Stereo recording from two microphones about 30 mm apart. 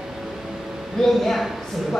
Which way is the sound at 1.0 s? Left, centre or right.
Centre.